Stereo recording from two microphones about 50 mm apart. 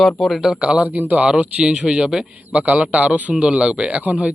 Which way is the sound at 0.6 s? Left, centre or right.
Right.